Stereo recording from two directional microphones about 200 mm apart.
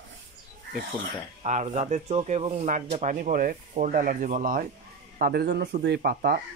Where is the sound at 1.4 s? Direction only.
35° right (ahead or behind).